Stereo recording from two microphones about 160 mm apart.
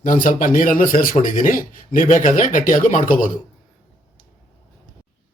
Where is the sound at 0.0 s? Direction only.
55° left (ahead or behind).